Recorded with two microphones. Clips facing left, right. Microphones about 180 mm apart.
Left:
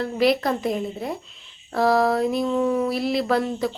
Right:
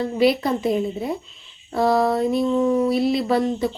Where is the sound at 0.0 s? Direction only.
Centre (ahead or behind).